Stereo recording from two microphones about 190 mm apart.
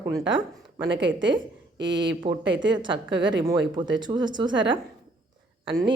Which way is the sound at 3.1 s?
70° right (ahead or behind).